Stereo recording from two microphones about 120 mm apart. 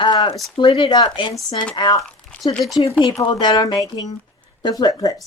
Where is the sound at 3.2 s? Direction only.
35° left (ahead or behind).